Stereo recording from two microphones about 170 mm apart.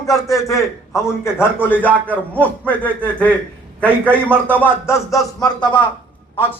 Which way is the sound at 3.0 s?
10° left (ahead or behind).